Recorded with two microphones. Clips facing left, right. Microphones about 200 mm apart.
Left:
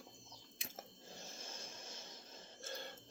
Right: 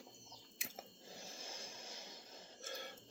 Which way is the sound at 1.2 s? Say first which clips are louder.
Right 1 dB; 10° right (ahead or behind).